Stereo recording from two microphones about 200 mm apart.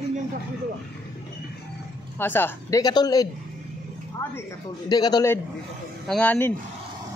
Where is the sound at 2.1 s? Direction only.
10° left (ahead or behind).